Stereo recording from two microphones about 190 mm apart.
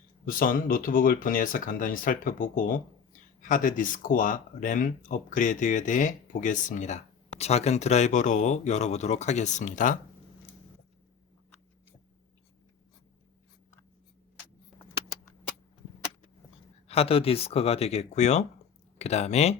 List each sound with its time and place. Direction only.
0.3 s speech: 45° left (ahead or behind)
16.9 s speech: 30° left (ahead or behind)